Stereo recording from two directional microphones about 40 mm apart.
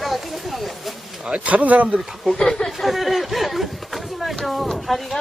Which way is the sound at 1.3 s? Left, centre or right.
Right.